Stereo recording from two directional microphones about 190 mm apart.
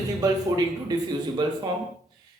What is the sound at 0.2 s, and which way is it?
Speech, 20° right (ahead or behind).